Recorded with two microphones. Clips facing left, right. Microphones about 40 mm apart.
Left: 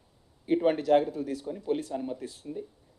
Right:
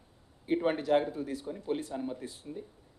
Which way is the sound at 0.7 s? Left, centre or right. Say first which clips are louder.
Left 4 dB; centre.